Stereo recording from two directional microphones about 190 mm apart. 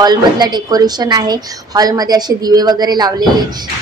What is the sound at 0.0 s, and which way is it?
A woman's voice, 20° right (ahead or behind).